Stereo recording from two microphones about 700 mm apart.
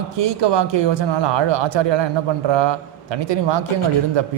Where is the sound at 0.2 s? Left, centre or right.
Right.